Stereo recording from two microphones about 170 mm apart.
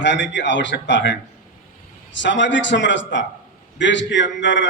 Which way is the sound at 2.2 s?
90° left.